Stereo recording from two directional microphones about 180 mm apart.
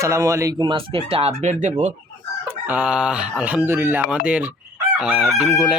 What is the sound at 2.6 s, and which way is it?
Speech, 10° right (ahead or behind).